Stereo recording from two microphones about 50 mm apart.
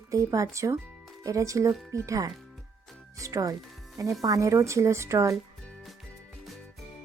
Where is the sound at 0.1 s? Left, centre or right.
Right.